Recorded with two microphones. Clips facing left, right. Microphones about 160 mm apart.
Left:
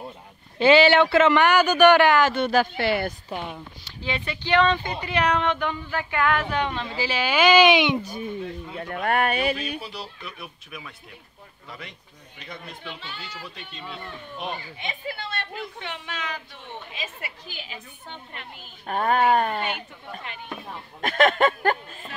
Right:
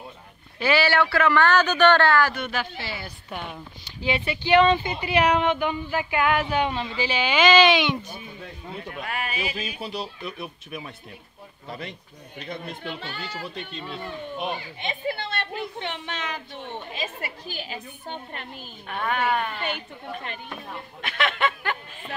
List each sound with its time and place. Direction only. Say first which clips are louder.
0.6 s speech: left 6 dB; 25° left (ahead or behind)
2.4 s speech: left 8 dB; 40° left (ahead or behind)
2.8 s music: left 11 dB; 60° left (ahead or behind)
4.0 s speech: right 4 dB; 10° right (ahead or behind)
7.0 s speech: even; 5° left (ahead or behind); by 8.0 s 20° left (ahead or behind)
8.9 s music: left 10 dB; 60° left (ahead or behind)
9.8 s a woman's voice: right 4 dB; 20° right (ahead or behind)
12.4 s speech: right 5 dB; 45° right (ahead or behind)
14.8 s a woman's voice: right 4 dB; 30° right (ahead or behind)
16.9 s a woman's voice: right 4 dB; 40° right (ahead or behind)
18.9 s speech: left 5 dB; 40° left (ahead or behind)
21.0 s a sound: left 6 dB; 45° left (ahead or behind)